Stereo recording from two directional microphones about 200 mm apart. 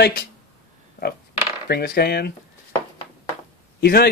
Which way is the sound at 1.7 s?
50° left (ahead or behind).